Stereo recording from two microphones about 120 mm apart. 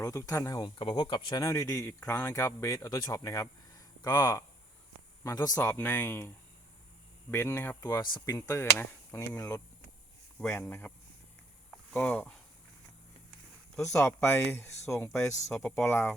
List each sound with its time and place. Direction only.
0.0 s speech: 30° left (ahead or behind)
0.8 s speech: 45° left (ahead or behind)
1.4 s speech: 25° left (ahead or behind)
5.5 s speech: 20° left (ahead or behind)
7.8 s speech: 30° left (ahead or behind)
8.4 s speech: 20° left (ahead or behind)
11.7 s a sound: 5° left (ahead or behind)
13.8 s speech: 25° left (ahead or behind)
15.4 s speech: 5° left (ahead or behind)
15.7 s speech: 20° left (ahead or behind)